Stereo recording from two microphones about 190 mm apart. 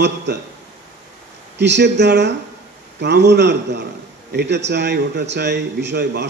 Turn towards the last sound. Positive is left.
turn(degrees=-65)  # may be behind; listen again after turning